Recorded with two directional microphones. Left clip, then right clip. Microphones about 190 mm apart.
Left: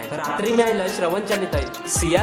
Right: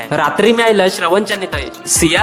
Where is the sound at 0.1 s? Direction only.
55° right (ahead or behind).